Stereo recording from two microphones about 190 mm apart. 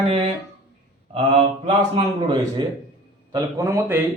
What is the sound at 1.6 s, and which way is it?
A man's voice, 25° right (ahead or behind).